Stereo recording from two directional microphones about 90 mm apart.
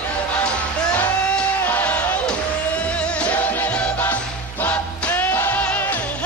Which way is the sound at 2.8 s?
15° left (ahead or behind).